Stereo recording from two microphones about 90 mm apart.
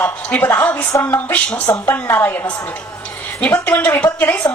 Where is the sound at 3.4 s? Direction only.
20° left (ahead or behind).